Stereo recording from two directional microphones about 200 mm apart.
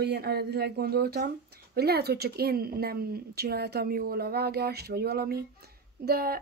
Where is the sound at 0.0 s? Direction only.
55° right (ahead or behind).